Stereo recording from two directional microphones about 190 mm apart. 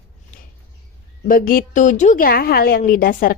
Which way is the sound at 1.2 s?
45° left (ahead or behind).